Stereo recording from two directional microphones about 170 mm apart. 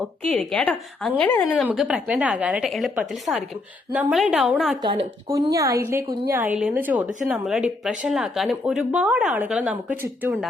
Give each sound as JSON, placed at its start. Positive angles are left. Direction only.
{"t": 0.3, "sound": "a woman's voice", "side_deg": 5}
{"t": 1.5, "sound": "a woman's voice", "side_deg": 0}
{"t": 4.8, "sound": "speech", "side_deg": -25}